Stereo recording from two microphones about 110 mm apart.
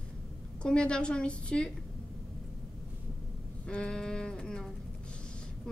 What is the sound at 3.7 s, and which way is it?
A woman's voice, 10° left (ahead or behind).